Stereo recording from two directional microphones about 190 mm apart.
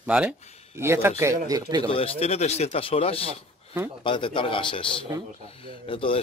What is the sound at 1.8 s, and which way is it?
A man's voice, 30° left (ahead or behind).